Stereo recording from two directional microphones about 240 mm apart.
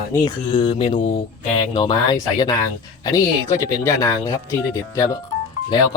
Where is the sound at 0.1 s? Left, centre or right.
Centre.